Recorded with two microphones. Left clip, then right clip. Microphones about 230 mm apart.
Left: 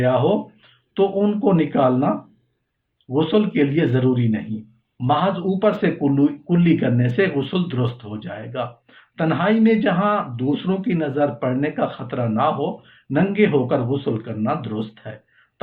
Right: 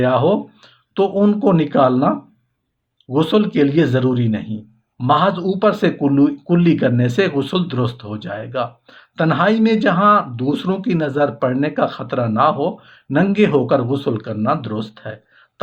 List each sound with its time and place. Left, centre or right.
0.0 s speech: right